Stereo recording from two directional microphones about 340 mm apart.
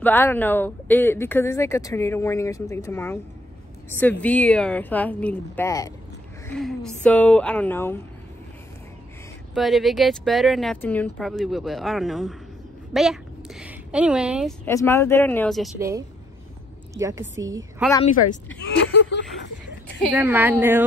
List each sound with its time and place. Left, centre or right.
0.0 s a woman's voice: centre
9.5 s a woman's voice: centre
18.9 s a sound: left
20.1 s a woman's voice: centre